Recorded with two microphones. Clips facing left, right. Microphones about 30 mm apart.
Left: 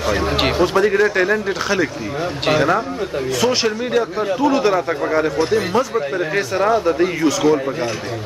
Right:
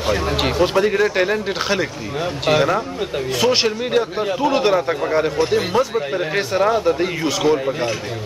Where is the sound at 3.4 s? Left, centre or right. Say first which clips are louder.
Right 1 dB; centre.